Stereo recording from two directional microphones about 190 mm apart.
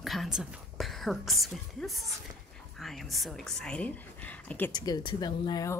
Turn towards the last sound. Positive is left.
turn(degrees=20)  # may be behind; listen again after turning